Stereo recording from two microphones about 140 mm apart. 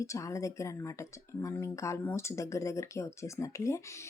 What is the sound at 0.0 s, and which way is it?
Speech, 20° left (ahead or behind).